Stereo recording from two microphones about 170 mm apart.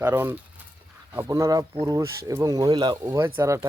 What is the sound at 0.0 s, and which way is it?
Speech, 15° right (ahead or behind).